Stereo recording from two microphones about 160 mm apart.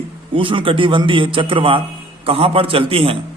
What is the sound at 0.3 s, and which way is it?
A man's voice, 35° right (ahead or behind).